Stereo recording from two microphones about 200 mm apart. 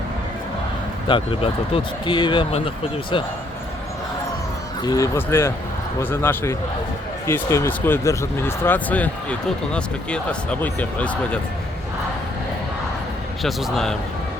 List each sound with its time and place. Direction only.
1.0 s speech: 25° left (ahead or behind)
4.8 s speech: 20° left (ahead or behind)
13.4 s a man's voice: centre (ahead or behind)